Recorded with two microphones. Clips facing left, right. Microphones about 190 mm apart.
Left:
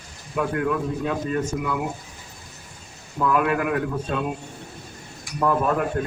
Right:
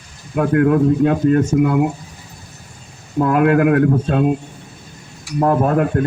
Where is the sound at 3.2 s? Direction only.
60° right (ahead or behind).